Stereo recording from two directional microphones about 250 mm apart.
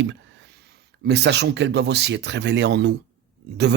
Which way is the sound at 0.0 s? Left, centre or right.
Right.